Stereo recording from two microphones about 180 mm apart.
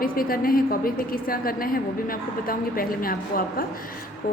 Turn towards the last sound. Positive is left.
turn(degrees=55)  # may be behind; listen again after turning